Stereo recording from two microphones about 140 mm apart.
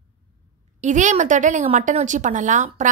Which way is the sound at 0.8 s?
60° right (ahead or behind).